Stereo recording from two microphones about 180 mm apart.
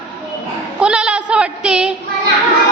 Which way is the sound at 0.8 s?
5° right (ahead or behind).